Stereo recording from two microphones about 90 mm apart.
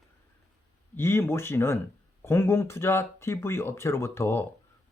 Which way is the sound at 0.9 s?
30° left (ahead or behind).